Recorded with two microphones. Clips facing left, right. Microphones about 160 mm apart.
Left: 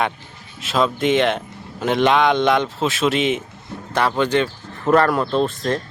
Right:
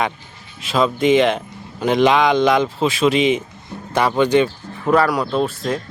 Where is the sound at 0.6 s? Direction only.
Centre (ahead or behind).